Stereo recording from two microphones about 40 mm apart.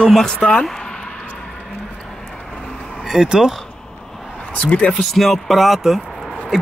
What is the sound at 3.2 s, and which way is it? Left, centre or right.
Speech, centre.